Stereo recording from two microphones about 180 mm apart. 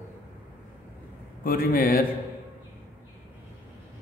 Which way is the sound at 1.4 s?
55° left (ahead or behind).